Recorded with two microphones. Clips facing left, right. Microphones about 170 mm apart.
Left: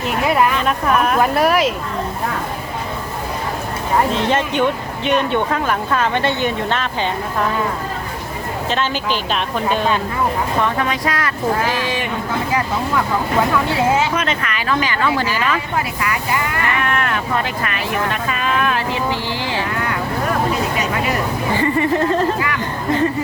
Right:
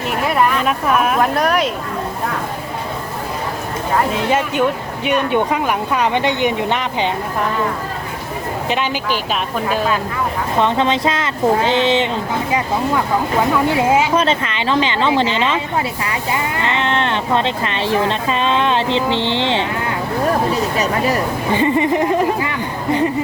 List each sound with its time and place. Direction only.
0.3 s speech: centre (ahead or behind)
4.1 s speech: 10° right (ahead or behind)
8.7 s speech: 15° right (ahead or behind)
10.6 s speech: 25° right (ahead or behind)
14.2 s speech: 30° right (ahead or behind)
21.5 s speech: 20° right (ahead or behind)